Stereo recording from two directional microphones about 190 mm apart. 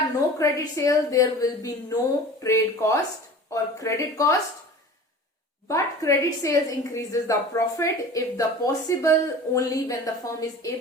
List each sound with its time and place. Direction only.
0.3 s a woman's voice: 15° left (ahead or behind)
5.6 s a woman's voice: 15° left (ahead or behind)